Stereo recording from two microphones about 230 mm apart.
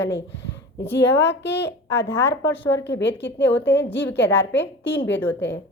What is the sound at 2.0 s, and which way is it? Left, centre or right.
Speech, centre.